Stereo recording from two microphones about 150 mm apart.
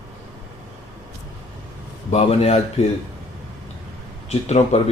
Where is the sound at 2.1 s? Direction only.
45° left (ahead or behind).